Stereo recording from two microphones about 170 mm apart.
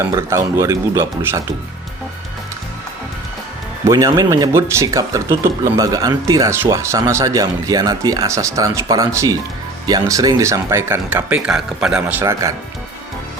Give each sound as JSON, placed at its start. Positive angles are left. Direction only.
{"t": 0.0, "sound": "speech", "side_deg": -15}
{"t": 3.8, "sound": "speech", "side_deg": -20}
{"t": 12.2, "sound": "speech", "side_deg": -20}